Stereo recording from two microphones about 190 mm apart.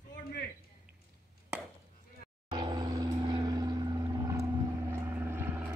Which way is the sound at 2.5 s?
20° right (ahead or behind).